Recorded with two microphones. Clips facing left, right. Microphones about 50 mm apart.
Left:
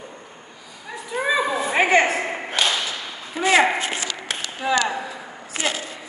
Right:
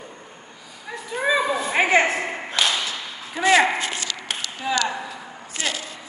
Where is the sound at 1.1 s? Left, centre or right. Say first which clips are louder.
Even; centre.